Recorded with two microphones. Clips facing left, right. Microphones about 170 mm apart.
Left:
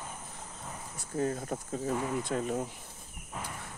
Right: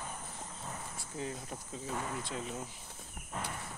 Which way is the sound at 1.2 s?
50° left (ahead or behind).